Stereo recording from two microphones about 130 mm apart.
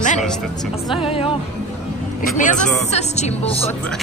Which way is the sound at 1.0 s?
45° left (ahead or behind).